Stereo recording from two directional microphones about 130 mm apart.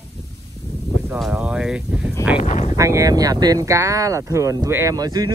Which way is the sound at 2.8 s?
25° right (ahead or behind).